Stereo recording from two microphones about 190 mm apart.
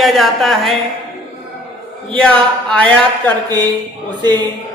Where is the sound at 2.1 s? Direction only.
5° left (ahead or behind).